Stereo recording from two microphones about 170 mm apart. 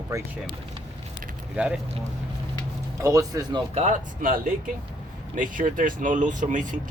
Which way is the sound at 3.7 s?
45° right (ahead or behind).